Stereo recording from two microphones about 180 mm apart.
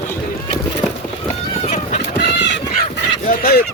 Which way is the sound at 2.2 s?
75° left (ahead or behind).